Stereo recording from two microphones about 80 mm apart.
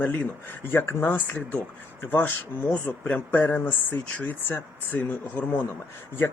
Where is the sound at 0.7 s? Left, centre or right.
Left.